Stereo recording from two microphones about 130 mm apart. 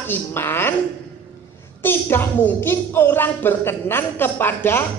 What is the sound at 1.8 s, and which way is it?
Speech, 15° left (ahead or behind).